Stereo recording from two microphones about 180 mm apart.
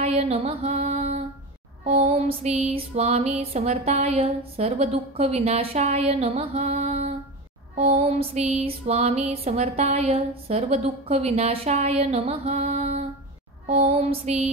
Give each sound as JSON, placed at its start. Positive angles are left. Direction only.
{"t": 0.0, "sound": "music", "side_deg": -35}